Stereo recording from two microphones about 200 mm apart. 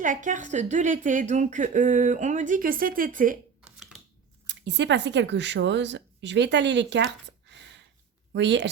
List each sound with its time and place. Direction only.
0.0 s a woman's voice: 40° right (ahead or behind)
4.4 s speech: 60° right (ahead or behind)